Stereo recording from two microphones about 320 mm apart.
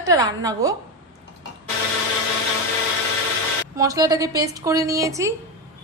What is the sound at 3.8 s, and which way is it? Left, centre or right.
A woman's voice, centre.